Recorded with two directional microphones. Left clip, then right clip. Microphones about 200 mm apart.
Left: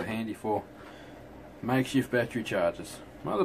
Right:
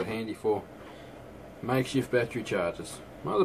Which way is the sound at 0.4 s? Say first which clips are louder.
Right 2 dB; 25° left (ahead or behind).